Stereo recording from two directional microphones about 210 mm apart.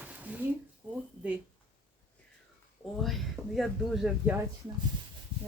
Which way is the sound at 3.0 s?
Centre (ahead or behind).